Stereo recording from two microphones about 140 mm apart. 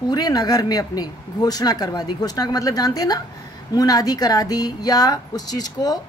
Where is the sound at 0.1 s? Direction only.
30° left (ahead or behind).